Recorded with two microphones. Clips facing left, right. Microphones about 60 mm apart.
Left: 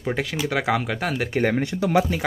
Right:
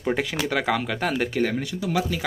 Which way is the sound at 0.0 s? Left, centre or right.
Centre.